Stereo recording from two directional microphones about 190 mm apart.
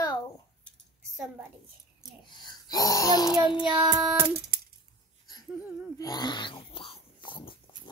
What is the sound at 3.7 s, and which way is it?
Speech, 20° right (ahead or behind).